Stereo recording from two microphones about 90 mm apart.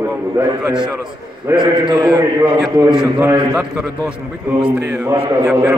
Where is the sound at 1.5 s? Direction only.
60° right (ahead or behind).